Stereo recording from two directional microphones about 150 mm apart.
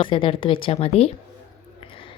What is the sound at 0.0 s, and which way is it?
A woman's voice, 35° left (ahead or behind).